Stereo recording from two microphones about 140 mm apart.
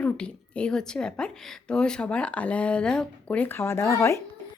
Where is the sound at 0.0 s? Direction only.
10° left (ahead or behind).